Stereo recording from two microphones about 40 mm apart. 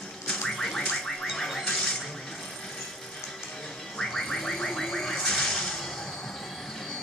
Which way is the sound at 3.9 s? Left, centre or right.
Centre.